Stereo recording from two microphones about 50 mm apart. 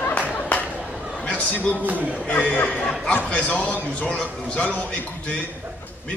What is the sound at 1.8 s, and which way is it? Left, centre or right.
Speech, right.